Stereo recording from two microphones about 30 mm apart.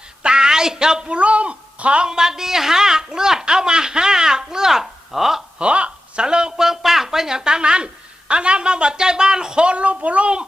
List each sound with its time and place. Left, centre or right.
0.2 s a sound: right
1.1 s speech: right
2.0 s speech: right
5.5 s a sound: right
6.2 s speech: right
6.6 s speech: centre
9.6 s speech: right